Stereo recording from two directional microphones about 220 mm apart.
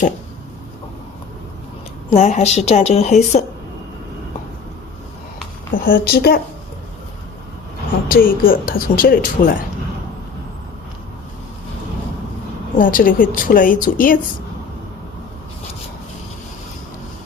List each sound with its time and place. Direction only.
2.0 s speech: 30° left (ahead or behind)
5.7 s a woman's voice: 40° left (ahead or behind)
8.1 s speech: 40° left (ahead or behind)
12.8 s speech: 40° left (ahead or behind)